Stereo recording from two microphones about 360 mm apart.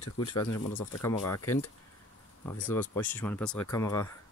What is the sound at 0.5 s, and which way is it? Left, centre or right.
Speech, left.